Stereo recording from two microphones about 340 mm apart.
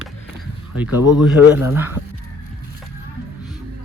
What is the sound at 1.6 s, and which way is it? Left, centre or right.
Speech, centre.